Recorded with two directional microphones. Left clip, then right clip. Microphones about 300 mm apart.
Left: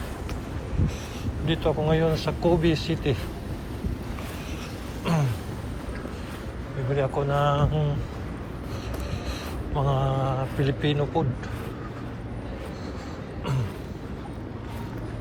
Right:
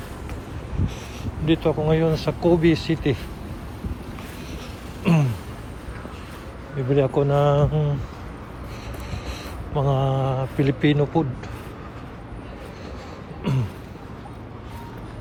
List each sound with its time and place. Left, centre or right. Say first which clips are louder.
1.2 s speech: right 5 dB; centre
6.9 s speech: right 5 dB; right
9.7 s speech: right 3 dB; centre
13.4 s a sound: right 4 dB; right